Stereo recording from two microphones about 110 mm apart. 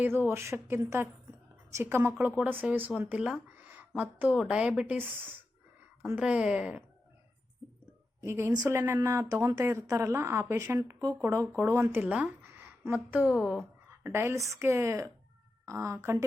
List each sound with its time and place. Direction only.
0.0 s a woman's voice: 20° right (ahead or behind)
6.1 s a woman's voice: 10° right (ahead or behind)
8.2 s speech: 25° right (ahead or behind)
13.3 s speech: 5° right (ahead or behind)
14.0 s speech: 20° right (ahead or behind)